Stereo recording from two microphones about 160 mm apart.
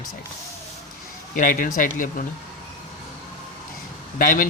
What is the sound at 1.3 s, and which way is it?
Speech, 60° left (ahead or behind).